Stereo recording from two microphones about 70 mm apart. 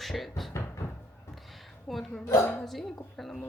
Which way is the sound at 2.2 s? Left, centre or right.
Left.